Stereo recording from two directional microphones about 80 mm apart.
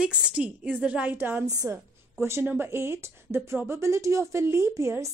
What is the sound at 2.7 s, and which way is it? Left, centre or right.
Speech, right.